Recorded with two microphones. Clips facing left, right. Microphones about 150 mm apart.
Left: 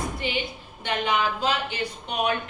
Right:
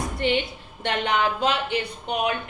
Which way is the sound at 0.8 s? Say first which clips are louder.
Right 2 dB; 65° right (ahead or behind).